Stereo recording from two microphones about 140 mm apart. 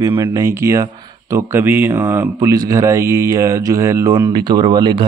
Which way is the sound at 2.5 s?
25° right (ahead or behind).